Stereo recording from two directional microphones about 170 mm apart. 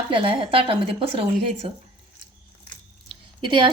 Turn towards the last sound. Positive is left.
turn(degrees=-30)  # may be behind; listen again after turning